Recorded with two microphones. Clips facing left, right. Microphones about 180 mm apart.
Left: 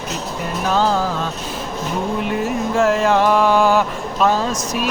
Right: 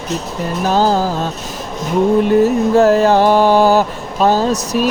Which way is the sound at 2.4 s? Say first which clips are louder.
Right 7 dB; 40° right (ahead or behind).